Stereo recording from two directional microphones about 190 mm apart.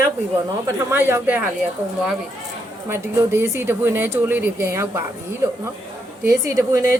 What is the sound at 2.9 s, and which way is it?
Speech, 10° right (ahead or behind).